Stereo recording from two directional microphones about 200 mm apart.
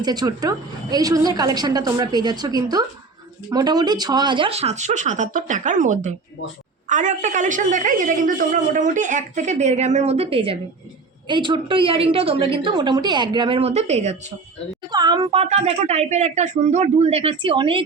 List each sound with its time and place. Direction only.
0.0 s a woman's voice: 20° right (ahead or behind)
14.9 s a woman's voice: 20° right (ahead or behind)